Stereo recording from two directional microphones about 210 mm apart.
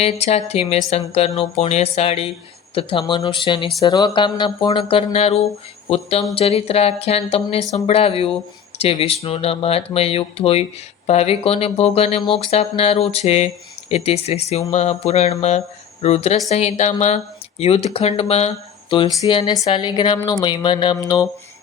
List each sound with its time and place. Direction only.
0.0 s speech: 30° left (ahead or behind)